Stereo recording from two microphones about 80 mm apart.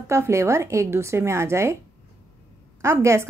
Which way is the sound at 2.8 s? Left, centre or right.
Right.